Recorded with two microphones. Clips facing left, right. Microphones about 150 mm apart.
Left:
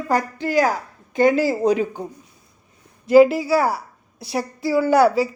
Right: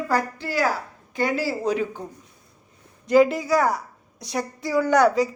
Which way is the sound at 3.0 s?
5° left (ahead or behind).